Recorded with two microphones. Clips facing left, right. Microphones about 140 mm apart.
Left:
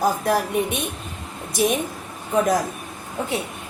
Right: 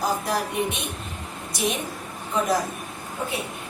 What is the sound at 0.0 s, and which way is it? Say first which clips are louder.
Speech: left 5 dB; 50° left (ahead or behind).